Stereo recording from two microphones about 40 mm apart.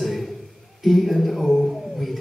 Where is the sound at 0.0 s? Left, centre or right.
Centre.